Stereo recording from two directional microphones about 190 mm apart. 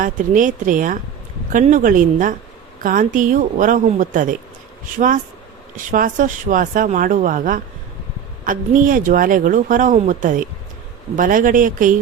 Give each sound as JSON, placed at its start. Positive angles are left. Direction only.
{"t": 0.0, "sound": "speech", "side_deg": -45}